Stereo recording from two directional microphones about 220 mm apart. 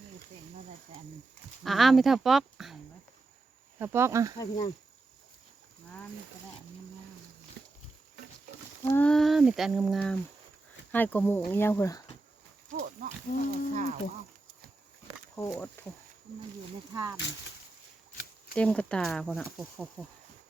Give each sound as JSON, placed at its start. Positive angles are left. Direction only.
{"t": 1.6, "sound": "speech", "side_deg": 0}
{"t": 3.8, "sound": "speech", "side_deg": -10}
{"t": 4.4, "sound": "speech", "side_deg": 20}
{"t": 8.8, "sound": "speech", "side_deg": 10}
{"t": 12.7, "sound": "speech", "side_deg": -40}
{"t": 15.4, "sound": "speech", "side_deg": 5}
{"t": 16.9, "sound": "speech", "side_deg": -15}
{"t": 18.5, "sound": "speech", "side_deg": 5}